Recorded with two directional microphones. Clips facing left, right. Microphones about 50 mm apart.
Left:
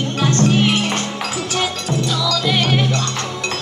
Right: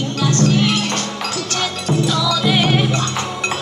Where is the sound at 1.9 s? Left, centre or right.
Centre.